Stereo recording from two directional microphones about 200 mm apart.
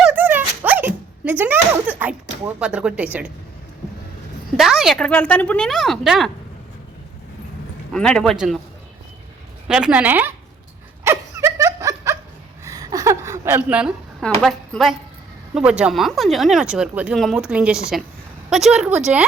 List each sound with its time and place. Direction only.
0.0 s dog: 10° right (ahead or behind)
4.5 s speech: centre (ahead or behind)
7.9 s speech: 5° left (ahead or behind)
9.6 s a woman's voice: 5° right (ahead or behind)
11.0 s laughter: 15° right (ahead or behind)
12.6 s a sound: 15° right (ahead or behind); by 14.3 s centre (ahead or behind)
14.4 s speech: centre (ahead or behind)